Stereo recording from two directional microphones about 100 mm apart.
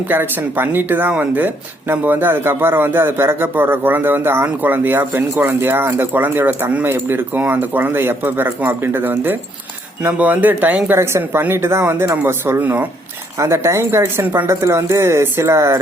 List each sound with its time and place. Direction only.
0.1 s speech: 20° right (ahead or behind)